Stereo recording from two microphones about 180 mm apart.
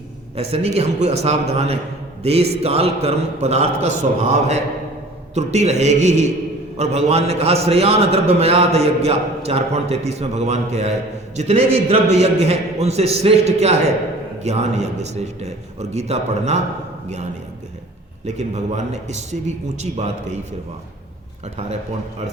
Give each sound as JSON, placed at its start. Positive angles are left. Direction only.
{"t": 0.3, "sound": "a man's voice", "side_deg": -35}
{"t": 18.3, "sound": "a man's voice", "side_deg": -40}